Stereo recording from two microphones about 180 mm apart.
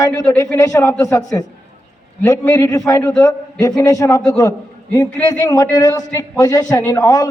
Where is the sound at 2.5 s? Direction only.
20° left (ahead or behind).